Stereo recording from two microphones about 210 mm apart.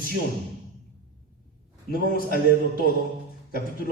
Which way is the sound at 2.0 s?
45° left (ahead or behind).